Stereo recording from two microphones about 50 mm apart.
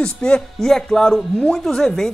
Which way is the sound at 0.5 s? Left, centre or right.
Centre.